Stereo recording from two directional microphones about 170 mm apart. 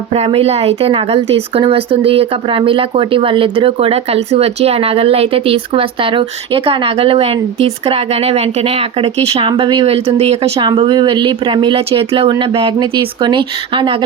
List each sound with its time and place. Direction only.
0.1 s speech: 35° right (ahead or behind)
10.7 s speech: 25° right (ahead or behind)